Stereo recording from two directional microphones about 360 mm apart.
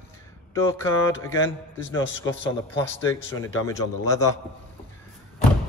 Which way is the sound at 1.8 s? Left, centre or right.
Left.